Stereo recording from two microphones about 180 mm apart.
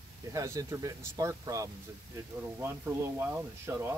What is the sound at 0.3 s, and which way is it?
Speech, 20° right (ahead or behind).